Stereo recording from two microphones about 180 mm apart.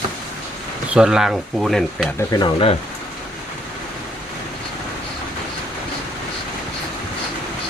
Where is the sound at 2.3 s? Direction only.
25° left (ahead or behind).